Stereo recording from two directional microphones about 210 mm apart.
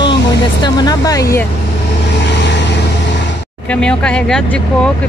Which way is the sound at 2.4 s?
55° left (ahead or behind).